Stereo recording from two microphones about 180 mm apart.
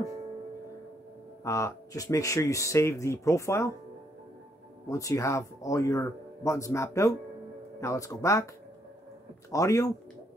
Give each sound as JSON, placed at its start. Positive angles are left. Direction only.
{"t": 1.4, "sound": "speech", "side_deg": 15}
{"t": 4.8, "sound": "speech", "side_deg": 20}
{"t": 9.5, "sound": "speech", "side_deg": 20}